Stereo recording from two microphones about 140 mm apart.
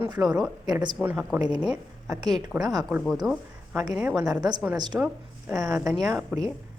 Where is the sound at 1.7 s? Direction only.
5° right (ahead or behind).